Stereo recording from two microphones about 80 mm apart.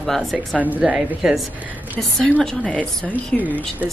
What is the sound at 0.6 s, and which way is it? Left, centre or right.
Speech, centre.